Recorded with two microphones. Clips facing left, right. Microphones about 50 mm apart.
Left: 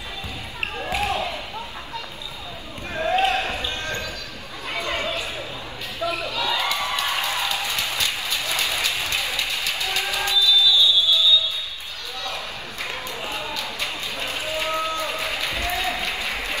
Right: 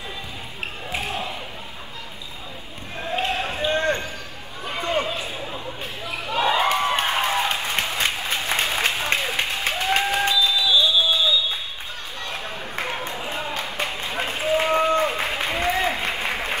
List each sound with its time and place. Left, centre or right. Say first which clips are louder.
3.1 s basketball bounce: left 4 dB; left
3.4 s basketball bounce: right 6 dB; right
4.6 s chatter: right 3 dB; right
6.2 s a sound: right 9 dB; right